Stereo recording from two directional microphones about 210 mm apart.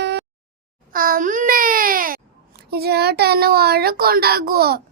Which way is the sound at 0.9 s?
40° right (ahead or behind).